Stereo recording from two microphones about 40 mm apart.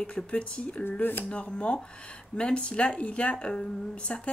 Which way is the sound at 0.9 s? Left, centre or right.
Left.